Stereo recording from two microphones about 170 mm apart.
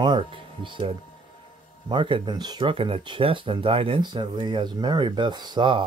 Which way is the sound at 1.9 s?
30° right (ahead or behind).